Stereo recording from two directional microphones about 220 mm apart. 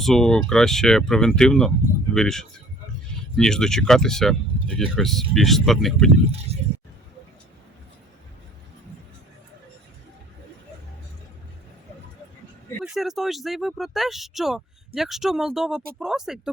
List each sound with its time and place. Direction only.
0.0 s speech: centre (ahead or behind)
6.5 s a sound: 30° right (ahead or behind)
12.8 s speech: centre (ahead or behind)